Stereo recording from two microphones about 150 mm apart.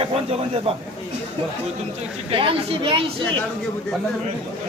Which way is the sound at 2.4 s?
40° right (ahead or behind).